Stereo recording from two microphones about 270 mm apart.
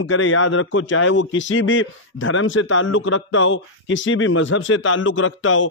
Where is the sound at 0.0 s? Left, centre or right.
Left.